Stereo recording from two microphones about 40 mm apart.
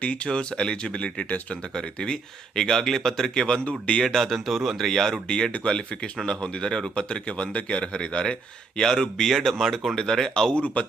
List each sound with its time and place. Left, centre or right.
0.0 s speech: left; by 3.4 s centre
3.4 s speech: left
4.0 s speech: centre
5.5 s speech: left
5.7 s speech: left
10.5 s speech: left